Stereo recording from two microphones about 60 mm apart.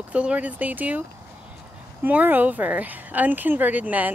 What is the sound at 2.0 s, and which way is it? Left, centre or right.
A woman's voice, right.